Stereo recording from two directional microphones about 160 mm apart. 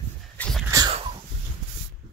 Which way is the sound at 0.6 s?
20° right (ahead or behind).